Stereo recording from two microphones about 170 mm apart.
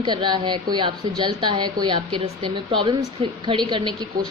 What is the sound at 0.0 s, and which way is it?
A woman's voice, 25° right (ahead or behind).